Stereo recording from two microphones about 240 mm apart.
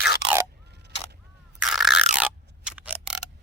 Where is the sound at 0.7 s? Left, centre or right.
Right.